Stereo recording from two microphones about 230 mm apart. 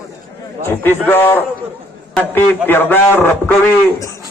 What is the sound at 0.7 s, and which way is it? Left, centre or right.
Music, centre.